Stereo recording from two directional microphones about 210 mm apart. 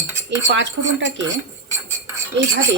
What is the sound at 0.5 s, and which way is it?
Speech, 60° right (ahead or behind).